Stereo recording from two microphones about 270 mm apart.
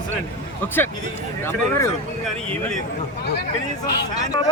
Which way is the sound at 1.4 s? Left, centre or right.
Centre.